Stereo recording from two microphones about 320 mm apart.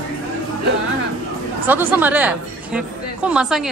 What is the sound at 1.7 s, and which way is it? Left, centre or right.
A woman's voice, centre.